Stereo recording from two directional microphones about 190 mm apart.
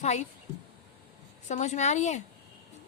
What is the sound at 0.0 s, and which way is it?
Speech, 35° left (ahead or behind).